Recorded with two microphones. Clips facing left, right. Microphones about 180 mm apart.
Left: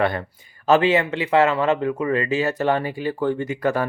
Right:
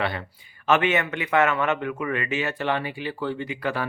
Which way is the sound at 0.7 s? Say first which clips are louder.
Left 5 dB; 30° left (ahead or behind).